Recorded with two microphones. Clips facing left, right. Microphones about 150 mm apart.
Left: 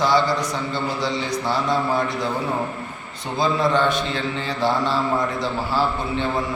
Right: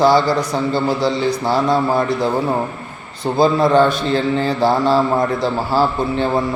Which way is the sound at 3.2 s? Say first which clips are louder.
Right 7 dB; 35° right (ahead or behind).